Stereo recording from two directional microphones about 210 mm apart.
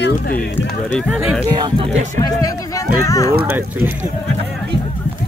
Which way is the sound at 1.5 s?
20° right (ahead or behind).